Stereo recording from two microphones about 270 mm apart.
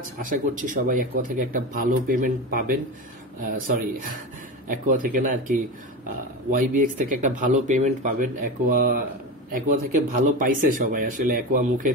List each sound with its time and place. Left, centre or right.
0.2 s speech: right